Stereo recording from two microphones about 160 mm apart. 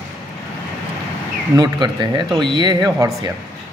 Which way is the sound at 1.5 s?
25° right (ahead or behind).